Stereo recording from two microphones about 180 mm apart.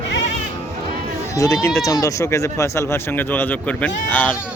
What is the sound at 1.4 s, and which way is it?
Speech, 15° left (ahead or behind).